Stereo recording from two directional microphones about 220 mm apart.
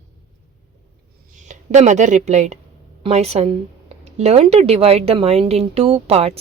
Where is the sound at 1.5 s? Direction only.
35° right (ahead or behind).